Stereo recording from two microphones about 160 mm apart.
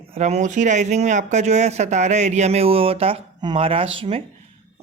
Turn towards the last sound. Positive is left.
turn(degrees=-35)  # may be behind; listen again after turning